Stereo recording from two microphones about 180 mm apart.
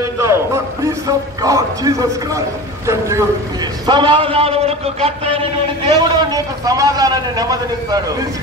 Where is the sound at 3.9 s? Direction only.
25° right (ahead or behind).